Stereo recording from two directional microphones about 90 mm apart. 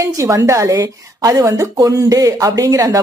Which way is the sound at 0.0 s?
35° right (ahead or behind).